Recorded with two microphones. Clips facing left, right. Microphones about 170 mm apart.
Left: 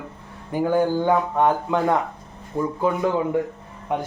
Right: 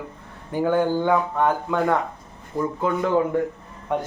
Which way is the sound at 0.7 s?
20° left (ahead or behind).